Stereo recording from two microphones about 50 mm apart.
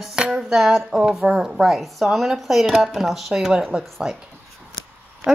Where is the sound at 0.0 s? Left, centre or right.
Centre.